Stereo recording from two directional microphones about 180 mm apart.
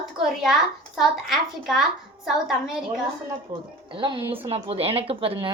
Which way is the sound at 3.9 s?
25° right (ahead or behind).